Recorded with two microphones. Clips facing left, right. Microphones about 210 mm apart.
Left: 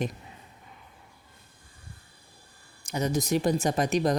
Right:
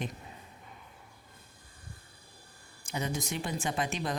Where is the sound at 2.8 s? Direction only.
40° left (ahead or behind).